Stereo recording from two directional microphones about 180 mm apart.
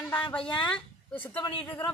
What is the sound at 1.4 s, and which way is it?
Speech, 25° left (ahead or behind).